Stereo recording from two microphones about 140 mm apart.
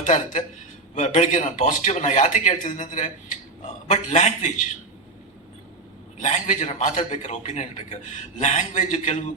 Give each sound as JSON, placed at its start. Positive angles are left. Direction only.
{"t": 0.0, "sound": "a man's voice", "side_deg": 65}
{"t": 6.1, "sound": "a man's voice", "side_deg": 60}